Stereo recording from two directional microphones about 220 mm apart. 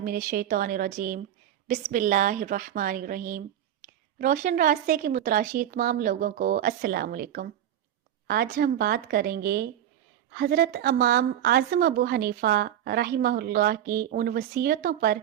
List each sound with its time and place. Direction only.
0.0 s a woman's voice: 40° right (ahead or behind)